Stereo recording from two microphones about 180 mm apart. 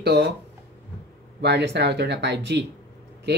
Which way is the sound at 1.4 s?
70° right (ahead or behind).